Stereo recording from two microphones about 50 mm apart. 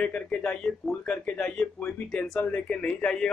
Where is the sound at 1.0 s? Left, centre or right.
Left.